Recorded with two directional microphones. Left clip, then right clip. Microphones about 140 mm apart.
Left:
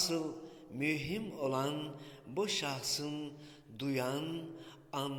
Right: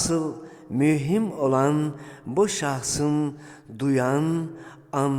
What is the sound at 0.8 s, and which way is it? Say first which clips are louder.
A man's voice: right 14 dB; 45° right (ahead or behind).